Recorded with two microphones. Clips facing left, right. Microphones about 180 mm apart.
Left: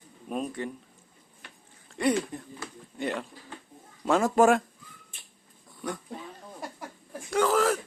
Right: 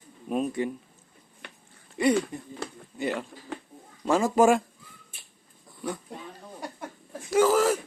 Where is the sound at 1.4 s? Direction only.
65° right (ahead or behind).